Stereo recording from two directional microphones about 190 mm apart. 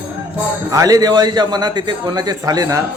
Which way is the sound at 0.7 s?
20° right (ahead or behind).